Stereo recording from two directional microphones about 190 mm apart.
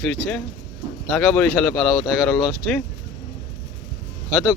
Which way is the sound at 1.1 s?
5° left (ahead or behind).